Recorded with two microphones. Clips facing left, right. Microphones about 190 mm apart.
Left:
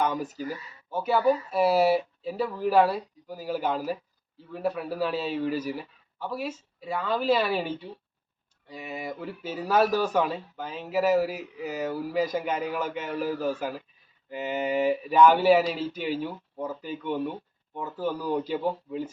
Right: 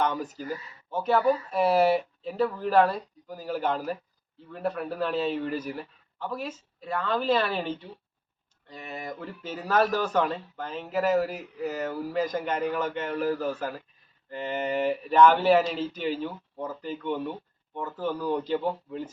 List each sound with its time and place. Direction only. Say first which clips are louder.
0.0 s speech: left 1 dB; 10° left (ahead or behind)